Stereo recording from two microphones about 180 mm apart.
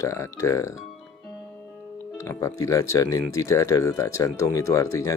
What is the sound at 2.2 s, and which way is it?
Speech, 15° left (ahead or behind).